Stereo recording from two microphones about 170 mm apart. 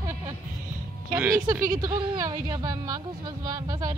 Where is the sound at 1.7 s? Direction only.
20° right (ahead or behind).